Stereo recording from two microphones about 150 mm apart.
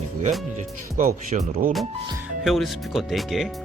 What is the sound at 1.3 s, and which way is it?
Speech, 50° right (ahead or behind).